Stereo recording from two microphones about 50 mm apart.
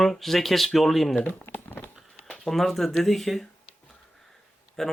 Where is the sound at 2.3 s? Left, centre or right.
Centre.